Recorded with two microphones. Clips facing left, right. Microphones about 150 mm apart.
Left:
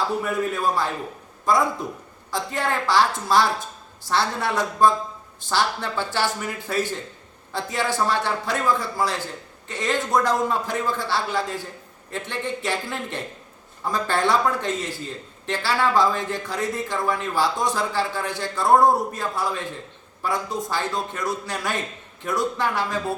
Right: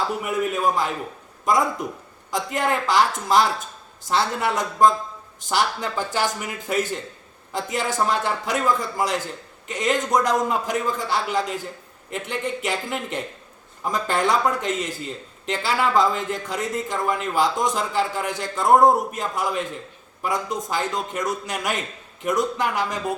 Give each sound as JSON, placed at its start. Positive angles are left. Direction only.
{"t": 0.2, "sound": "a man's voice", "side_deg": -15}